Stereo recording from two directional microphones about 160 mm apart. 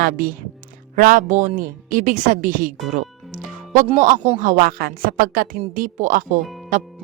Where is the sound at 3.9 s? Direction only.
50° right (ahead or behind).